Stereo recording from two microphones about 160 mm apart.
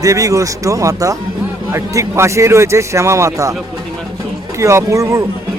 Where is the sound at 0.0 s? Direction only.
20° right (ahead or behind).